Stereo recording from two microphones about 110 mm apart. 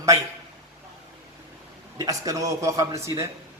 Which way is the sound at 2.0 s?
35° right (ahead or behind).